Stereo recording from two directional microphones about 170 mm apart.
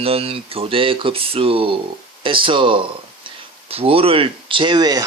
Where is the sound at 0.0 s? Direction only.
35° right (ahead or behind).